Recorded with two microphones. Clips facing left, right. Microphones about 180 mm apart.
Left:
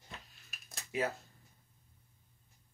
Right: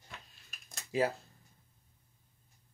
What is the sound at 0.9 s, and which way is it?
Speech, 30° right (ahead or behind).